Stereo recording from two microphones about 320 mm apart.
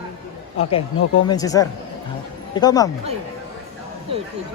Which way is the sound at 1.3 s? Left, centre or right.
Centre.